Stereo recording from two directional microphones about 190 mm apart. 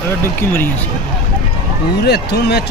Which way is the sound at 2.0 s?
60° left (ahead or behind).